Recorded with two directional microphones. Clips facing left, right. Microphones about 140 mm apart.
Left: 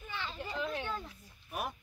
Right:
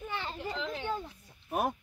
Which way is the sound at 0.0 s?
50° right (ahead or behind).